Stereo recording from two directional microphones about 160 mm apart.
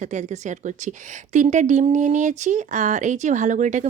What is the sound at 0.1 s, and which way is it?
A woman's voice, 50° right (ahead or behind).